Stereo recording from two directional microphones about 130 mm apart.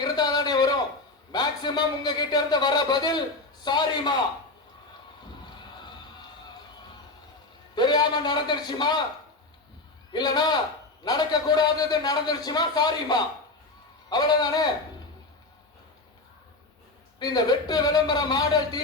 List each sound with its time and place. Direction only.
0.0 s a sound: 30° left (ahead or behind)
1.3 s a man's voice: 35° left (ahead or behind)
7.8 s a man's voice: 35° left (ahead or behind)
10.1 s a man's voice: 35° left (ahead or behind)
17.2 s a man's voice: 30° left (ahead or behind)